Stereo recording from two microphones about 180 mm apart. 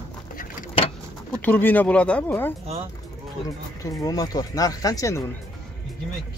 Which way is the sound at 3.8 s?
20° left (ahead or behind).